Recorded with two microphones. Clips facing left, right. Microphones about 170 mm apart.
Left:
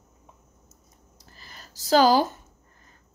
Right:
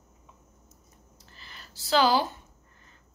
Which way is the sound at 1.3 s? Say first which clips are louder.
Left 2 dB; 40° left (ahead or behind).